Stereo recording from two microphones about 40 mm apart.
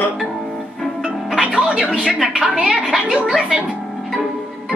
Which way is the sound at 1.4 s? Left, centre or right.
Right.